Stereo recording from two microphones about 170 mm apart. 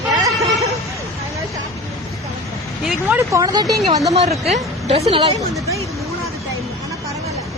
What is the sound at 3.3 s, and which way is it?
Speech, 20° right (ahead or behind).